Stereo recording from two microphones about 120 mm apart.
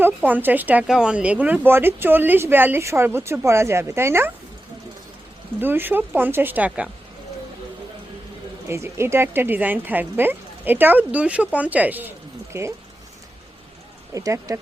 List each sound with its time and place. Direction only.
0.0 s speech: 15° right (ahead or behind)
5.5 s speech: 15° right (ahead or behind)
8.6 s speech: 20° right (ahead or behind)
14.1 s speech: 30° right (ahead or behind)